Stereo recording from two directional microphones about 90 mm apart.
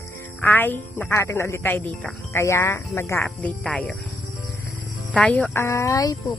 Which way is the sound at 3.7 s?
10° left (ahead or behind).